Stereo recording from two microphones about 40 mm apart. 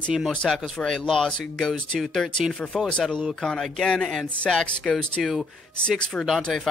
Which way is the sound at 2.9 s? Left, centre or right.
Left.